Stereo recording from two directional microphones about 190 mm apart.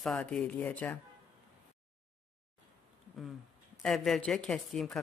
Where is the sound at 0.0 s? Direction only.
5° left (ahead or behind).